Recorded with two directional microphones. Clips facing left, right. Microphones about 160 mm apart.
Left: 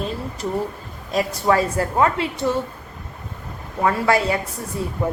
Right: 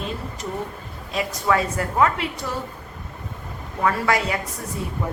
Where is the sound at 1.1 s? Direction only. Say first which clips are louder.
Left 3 dB; 35° left (ahead or behind).